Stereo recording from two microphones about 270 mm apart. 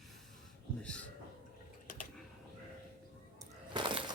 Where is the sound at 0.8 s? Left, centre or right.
Centre.